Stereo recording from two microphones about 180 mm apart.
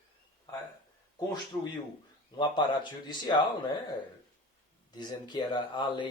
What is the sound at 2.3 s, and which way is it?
Speech, 25° left (ahead or behind).